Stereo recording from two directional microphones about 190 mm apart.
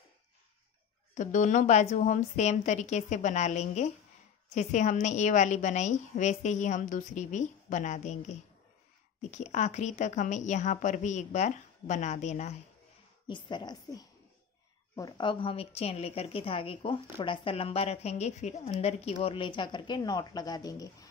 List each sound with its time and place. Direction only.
1.1 s a woman's voice: 40° left (ahead or behind)
13.3 s speech: 25° left (ahead or behind)